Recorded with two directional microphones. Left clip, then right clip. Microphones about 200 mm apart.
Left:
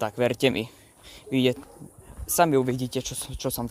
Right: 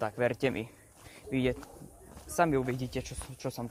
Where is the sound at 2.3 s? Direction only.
45° left (ahead or behind).